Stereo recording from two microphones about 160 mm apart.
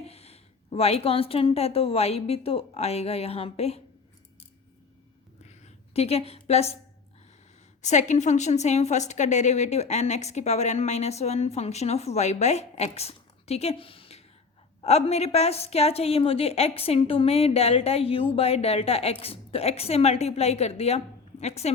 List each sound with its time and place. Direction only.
0.0 s a woman's voice: 40° left (ahead or behind)
5.5 s a sound: 40° left (ahead or behind)
7.8 s a woman's voice: 45° left (ahead or behind)